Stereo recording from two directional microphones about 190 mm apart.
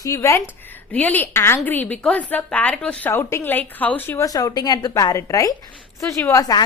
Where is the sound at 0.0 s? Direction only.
15° left (ahead or behind).